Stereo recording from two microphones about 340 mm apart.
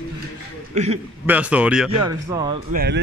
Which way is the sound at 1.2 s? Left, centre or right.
Centre.